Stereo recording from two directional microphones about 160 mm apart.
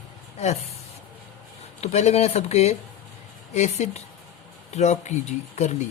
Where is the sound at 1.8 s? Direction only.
40° left (ahead or behind).